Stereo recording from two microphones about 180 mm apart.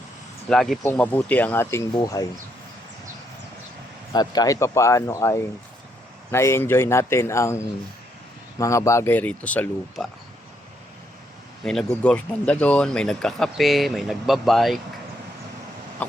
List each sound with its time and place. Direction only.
0.4 s speech: centre (ahead or behind)
1.9 s speech: 20° left (ahead or behind)
4.1 s speech: 20° left (ahead or behind); by 10.1 s 5° left (ahead or behind)
11.6 s speech: 5° left (ahead or behind)
16.0 s speech: 10° left (ahead or behind)